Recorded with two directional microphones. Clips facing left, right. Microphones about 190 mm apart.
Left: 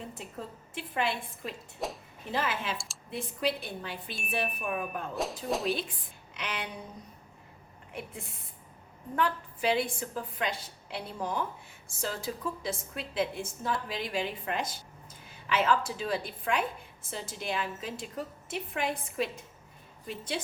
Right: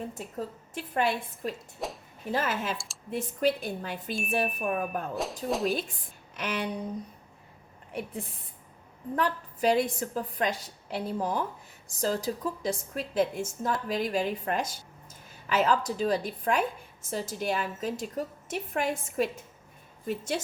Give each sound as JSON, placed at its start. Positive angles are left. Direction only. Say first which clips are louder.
{"t": 0.1, "sound": "a woman's voice", "louder": "right 5 dB", "side_deg": -40}
{"t": 1.8, "sound": "speech", "louder": "even", "side_deg": 0}
{"t": 2.3, "sound": "a woman's voice", "louder": "right 3 dB", "side_deg": -45}
{"t": 2.7, "sound": "speech", "louder": "even", "side_deg": 0}
{"t": 3.1, "sound": "a woman's voice", "louder": "right 5 dB", "side_deg": -45}
{"t": 5.1, "sound": "speech", "louder": "left 1 dB", "side_deg": 0}
{"t": 5.6, "sound": "a woman's voice", "louder": "right 3 dB", "side_deg": -45}
{"t": 9.1, "sound": "a woman's voice", "louder": "right 1 dB", "side_deg": -40}